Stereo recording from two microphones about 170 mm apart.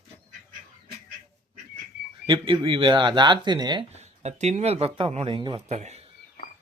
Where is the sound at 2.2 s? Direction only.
30° right (ahead or behind).